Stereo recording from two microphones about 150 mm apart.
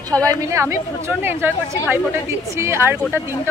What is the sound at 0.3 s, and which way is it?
A woman's voice, 20° right (ahead or behind).